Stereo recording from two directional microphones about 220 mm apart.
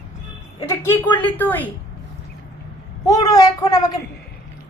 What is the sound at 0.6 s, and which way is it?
Speech, 10° left (ahead or behind).